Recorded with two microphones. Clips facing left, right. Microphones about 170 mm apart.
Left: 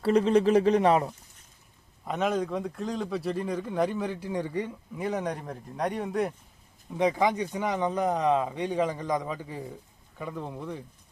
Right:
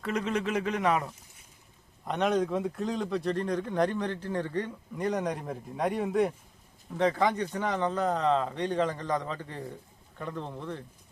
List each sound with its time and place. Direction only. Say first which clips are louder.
0.0 s speech: left 9 dB; 30° left (ahead or behind)
2.0 s speech: right 1 dB; centre (ahead or behind)
6.9 s speech: left 1 dB; 10° left (ahead or behind)